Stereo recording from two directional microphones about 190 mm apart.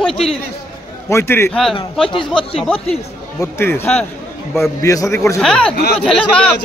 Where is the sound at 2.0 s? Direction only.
25° left (ahead or behind).